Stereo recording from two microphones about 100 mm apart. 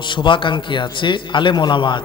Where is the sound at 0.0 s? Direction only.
50° left (ahead or behind).